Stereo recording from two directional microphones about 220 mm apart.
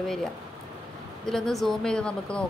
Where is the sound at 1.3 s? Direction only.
Centre (ahead or behind).